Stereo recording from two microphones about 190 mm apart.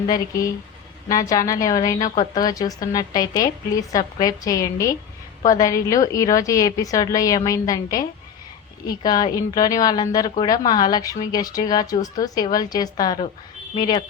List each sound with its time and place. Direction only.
0.1 s a woman's voice: 15° left (ahead or behind)